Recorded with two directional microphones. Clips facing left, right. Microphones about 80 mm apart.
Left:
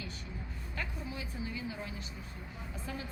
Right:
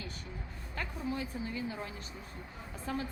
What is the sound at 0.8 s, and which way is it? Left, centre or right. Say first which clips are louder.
A woman's voice: right 5 dB; right.